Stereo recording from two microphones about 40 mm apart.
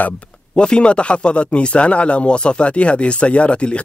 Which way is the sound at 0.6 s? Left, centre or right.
Left.